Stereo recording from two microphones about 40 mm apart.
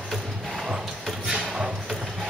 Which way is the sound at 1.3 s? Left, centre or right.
Right.